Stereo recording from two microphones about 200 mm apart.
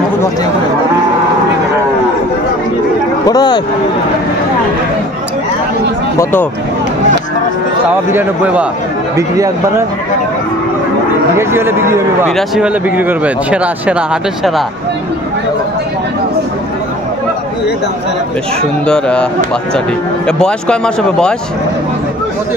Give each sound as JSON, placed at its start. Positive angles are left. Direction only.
{"t": 3.3, "sound": "speech", "side_deg": 20}
{"t": 8.1, "sound": "speech", "side_deg": -10}
{"t": 11.3, "sound": "speech", "side_deg": -10}
{"t": 12.3, "sound": "speech", "side_deg": 0}
{"t": 18.9, "sound": "speech", "side_deg": 5}
{"t": 20.2, "sound": "speech", "side_deg": 5}